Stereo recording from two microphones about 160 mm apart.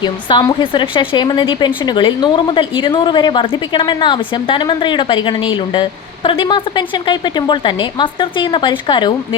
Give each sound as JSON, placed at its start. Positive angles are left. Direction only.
{"t": 0.0, "sound": "a woman's voice", "side_deg": 30}